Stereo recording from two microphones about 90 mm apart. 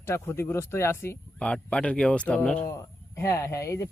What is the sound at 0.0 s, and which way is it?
Speech, 30° left (ahead or behind).